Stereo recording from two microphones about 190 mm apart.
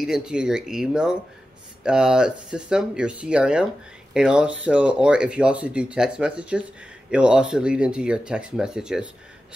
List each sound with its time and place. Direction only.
0.0 s speech: 5° right (ahead or behind)